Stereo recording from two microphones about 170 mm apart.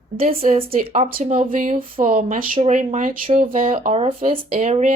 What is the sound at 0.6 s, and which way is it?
Speech, 60° right (ahead or behind).